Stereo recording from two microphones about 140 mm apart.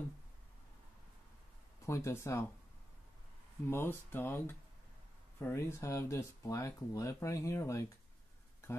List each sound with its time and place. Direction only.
1.9 s speech: 20° left (ahead or behind)
3.6 s speech: 15° left (ahead or behind)